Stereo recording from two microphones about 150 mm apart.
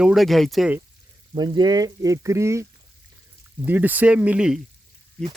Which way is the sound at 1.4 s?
30° right (ahead or behind).